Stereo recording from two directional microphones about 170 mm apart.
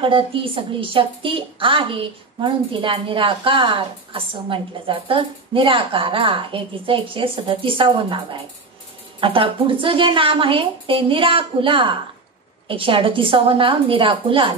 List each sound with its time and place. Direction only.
0.0 s speech: 30° right (ahead or behind)